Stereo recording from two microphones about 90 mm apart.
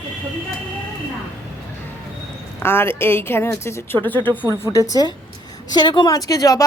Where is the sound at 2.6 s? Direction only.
25° left (ahead or behind).